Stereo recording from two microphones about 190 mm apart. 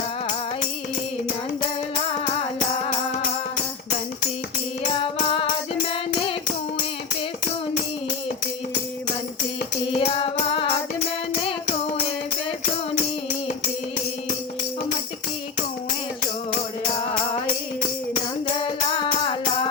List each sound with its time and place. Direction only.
5.1 s music: 30° left (ahead or behind)
9.9 s music: 30° left (ahead or behind)
18.9 s music: 25° left (ahead or behind)